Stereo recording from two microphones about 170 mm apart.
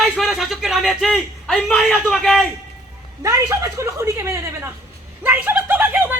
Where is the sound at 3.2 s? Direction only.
20° right (ahead or behind).